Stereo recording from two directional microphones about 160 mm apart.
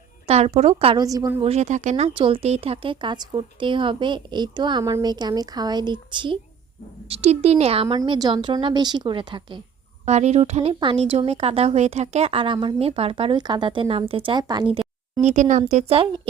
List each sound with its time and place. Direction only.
0.3 s speech: 40° right (ahead or behind)
0.9 s speech: 20° right (ahead or behind)
1.5 s a woman's voice: 45° right (ahead or behind)
2.1 s speech: 35° right (ahead or behind)
7.1 s speech: 40° right (ahead or behind)
10.1 s speech: 45° right (ahead or behind)
15.2 s a woman's voice: 50° right (ahead or behind)